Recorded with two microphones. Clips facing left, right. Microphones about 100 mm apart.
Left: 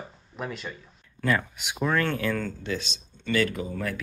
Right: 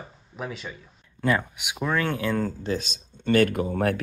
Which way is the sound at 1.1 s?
15° right (ahead or behind).